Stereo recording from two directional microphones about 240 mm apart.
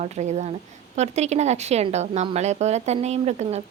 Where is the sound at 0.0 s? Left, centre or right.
Right.